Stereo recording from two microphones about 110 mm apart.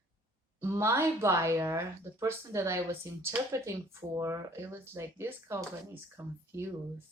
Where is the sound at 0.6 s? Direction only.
25° right (ahead or behind).